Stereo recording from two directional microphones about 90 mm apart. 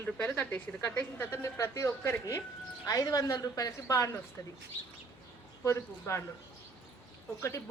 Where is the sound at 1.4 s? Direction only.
35° left (ahead or behind).